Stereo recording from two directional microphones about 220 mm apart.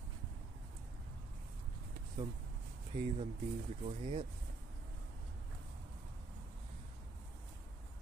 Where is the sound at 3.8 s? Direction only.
30° right (ahead or behind).